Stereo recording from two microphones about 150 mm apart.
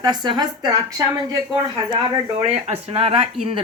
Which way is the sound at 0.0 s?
30° right (ahead or behind).